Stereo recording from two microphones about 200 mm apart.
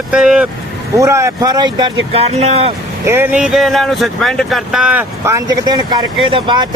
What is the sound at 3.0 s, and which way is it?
Speech, 10° right (ahead or behind).